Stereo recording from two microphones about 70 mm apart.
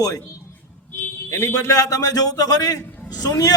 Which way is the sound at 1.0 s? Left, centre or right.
Left.